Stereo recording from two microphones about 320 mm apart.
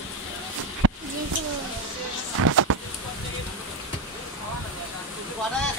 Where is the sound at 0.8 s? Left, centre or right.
Right.